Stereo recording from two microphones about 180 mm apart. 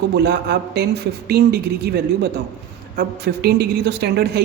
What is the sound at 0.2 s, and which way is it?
A woman's voice, 70° right (ahead or behind).